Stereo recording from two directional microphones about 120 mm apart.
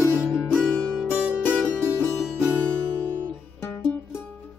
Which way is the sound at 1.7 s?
15° left (ahead or behind).